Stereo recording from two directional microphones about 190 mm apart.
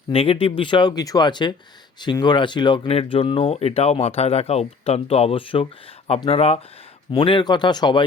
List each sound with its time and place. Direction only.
0.1 s speech: 30° left (ahead or behind)